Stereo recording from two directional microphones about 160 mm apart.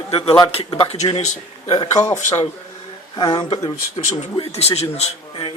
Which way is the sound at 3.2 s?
30° left (ahead or behind).